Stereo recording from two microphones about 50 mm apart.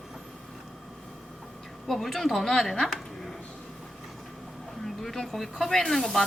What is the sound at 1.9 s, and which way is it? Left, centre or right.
Speech, centre.